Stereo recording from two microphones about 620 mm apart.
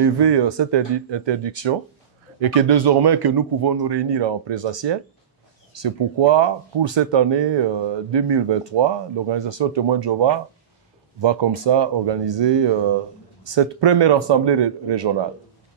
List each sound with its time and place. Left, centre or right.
0.0 s speech: right